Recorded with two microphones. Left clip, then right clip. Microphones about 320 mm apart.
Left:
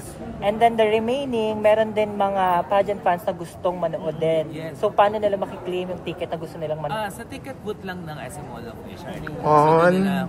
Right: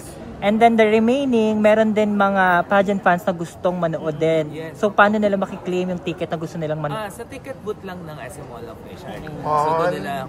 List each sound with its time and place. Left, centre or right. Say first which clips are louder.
0.4 s speech: right 3 dB; right
9.9 s speech: left 1 dB; centre